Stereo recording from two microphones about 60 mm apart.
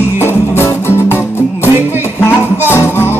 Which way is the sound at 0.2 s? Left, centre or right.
Left.